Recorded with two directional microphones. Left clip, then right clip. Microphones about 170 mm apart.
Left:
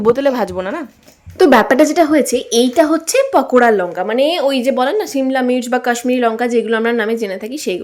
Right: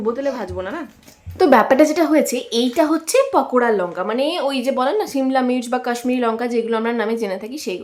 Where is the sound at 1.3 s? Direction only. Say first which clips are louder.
Left 3 dB; 20° left (ahead or behind).